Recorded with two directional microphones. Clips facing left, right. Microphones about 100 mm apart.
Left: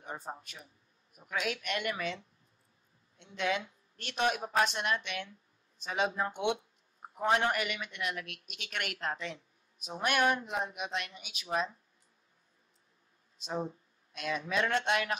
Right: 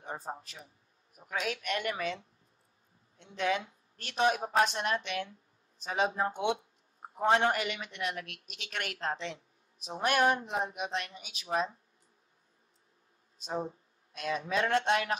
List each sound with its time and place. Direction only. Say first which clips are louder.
0.0 s speech: right 2 dB; 35° right (ahead or behind)
13.4 s speech: right 1 dB; 35° right (ahead or behind)